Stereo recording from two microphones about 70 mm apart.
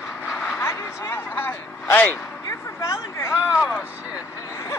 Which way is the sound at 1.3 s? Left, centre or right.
Left.